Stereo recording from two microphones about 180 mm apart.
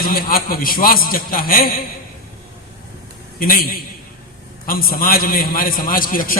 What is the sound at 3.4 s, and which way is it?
A man's voice, 55° left (ahead or behind).